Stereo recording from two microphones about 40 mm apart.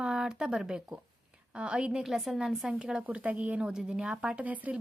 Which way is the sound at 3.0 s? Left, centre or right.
Right.